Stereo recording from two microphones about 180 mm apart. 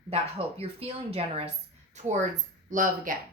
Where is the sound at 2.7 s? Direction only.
50° right (ahead or behind).